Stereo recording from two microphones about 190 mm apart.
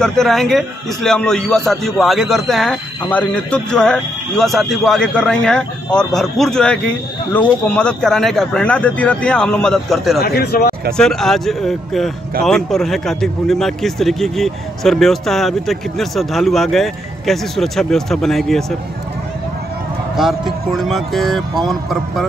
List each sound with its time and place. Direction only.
0.0 s a man's voice: centre (ahead or behind)
10.2 s speech: 55° left (ahead or behind)
11.0 s a man's voice: centre (ahead or behind)
20.2 s a man's voice: centre (ahead or behind)